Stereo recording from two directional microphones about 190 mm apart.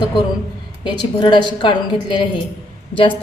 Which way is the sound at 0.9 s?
25° left (ahead or behind).